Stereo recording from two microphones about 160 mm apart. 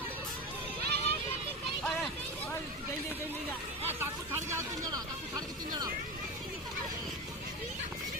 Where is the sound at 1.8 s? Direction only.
5° left (ahead or behind).